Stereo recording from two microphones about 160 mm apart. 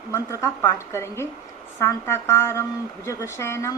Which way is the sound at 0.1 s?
20° left (ahead or behind).